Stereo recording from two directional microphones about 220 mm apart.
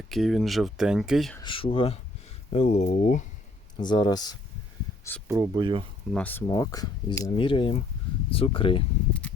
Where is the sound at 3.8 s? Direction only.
20° left (ahead or behind).